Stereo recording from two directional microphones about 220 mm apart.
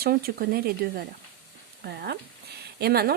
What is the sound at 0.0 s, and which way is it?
Speech, 45° right (ahead or behind).